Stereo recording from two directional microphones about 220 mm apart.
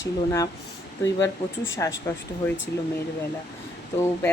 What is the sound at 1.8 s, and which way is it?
Speech, 10° left (ahead or behind).